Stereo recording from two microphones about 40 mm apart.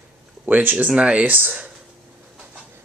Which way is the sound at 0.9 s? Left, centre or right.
Right.